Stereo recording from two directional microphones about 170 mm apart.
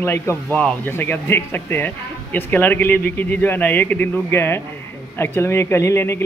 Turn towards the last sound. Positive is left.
turn(degrees=15)  # may be behind; listen again after turning